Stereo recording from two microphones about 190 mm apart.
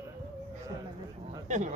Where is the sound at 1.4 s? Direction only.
40° right (ahead or behind).